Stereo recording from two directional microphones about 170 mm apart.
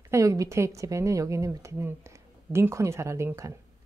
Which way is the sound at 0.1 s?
20° right (ahead or behind).